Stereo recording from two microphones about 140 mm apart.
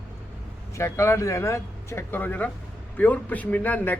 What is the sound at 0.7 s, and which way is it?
A man's voice, 20° left (ahead or behind).